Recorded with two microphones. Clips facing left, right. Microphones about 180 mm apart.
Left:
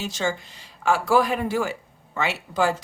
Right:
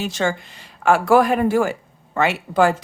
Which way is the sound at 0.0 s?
60° right (ahead or behind).